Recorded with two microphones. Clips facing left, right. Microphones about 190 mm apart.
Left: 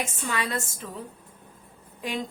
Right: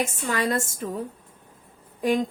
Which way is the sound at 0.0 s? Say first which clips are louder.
Right 5 dB; 45° right (ahead or behind).